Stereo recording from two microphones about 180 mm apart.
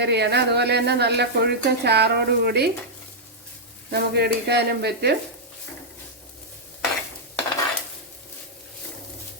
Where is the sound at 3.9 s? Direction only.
65° right (ahead or behind).